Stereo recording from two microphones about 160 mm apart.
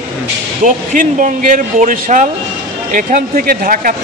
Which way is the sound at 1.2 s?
55° right (ahead or behind).